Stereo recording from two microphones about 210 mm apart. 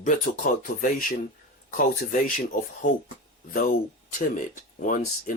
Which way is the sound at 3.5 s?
40° left (ahead or behind).